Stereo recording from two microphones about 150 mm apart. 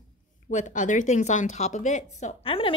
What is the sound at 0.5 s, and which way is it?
Speech, 55° left (ahead or behind).